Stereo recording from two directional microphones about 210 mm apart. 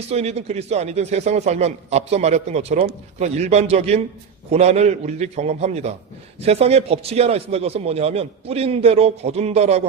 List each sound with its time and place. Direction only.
0.1 s a man's voice: 30° right (ahead or behind)